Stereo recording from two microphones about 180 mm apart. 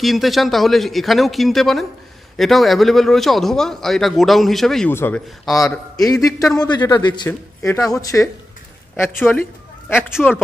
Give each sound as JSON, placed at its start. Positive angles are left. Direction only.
{"t": 0.0, "sound": "a man's voice", "side_deg": 0}
{"t": 5.4, "sound": "a man's voice", "side_deg": 0}
{"t": 6.2, "sound": "a man's voice", "side_deg": 20}